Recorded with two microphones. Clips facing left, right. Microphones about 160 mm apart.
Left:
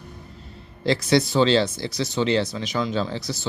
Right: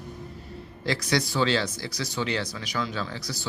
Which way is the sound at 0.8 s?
25° left (ahead or behind).